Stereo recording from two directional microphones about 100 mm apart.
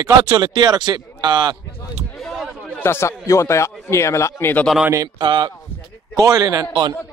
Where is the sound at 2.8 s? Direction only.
25° left (ahead or behind).